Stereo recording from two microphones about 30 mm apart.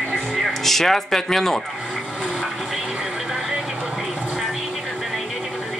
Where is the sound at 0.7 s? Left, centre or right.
Centre.